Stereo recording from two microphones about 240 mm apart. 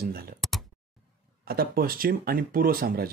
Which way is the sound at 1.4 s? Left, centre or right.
Right.